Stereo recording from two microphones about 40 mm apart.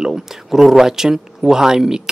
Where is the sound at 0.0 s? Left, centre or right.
Centre.